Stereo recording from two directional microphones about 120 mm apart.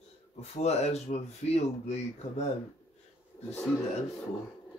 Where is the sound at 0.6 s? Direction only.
65° left (ahead or behind).